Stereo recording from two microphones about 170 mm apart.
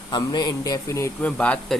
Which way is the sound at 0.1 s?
25° left (ahead or behind).